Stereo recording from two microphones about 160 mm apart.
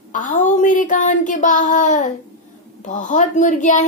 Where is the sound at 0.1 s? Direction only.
55° left (ahead or behind).